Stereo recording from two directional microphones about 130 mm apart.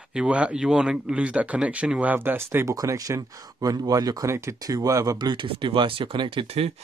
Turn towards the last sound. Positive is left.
turn(degrees=-45)  # may be behind; listen again after turning